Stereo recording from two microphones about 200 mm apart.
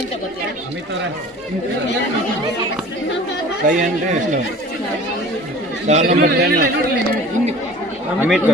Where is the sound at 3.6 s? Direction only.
40° right (ahead or behind).